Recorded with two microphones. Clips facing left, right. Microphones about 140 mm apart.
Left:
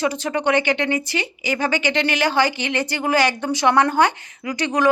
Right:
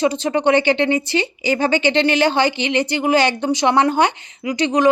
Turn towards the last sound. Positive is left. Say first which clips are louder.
# right 4 dB
turn(degrees=-20)  # may be behind; listen again after turning